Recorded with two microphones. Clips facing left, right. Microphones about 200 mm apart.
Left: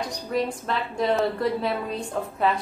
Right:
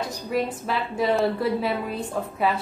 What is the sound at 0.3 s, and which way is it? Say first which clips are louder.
A woman's voice: even; 5° right (ahead or behind).